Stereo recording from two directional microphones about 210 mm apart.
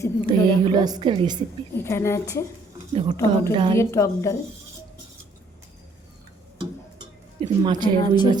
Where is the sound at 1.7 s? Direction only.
10° left (ahead or behind).